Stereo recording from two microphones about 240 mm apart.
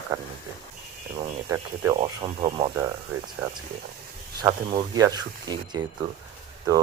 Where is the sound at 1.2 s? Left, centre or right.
Centre.